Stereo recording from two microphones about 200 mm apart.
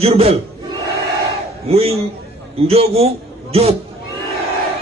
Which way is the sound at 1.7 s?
30° right (ahead or behind).